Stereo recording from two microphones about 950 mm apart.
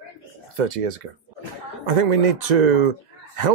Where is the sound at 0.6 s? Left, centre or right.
Right.